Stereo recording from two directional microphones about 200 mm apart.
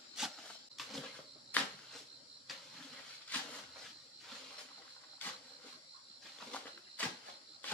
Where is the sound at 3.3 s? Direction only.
10° left (ahead or behind).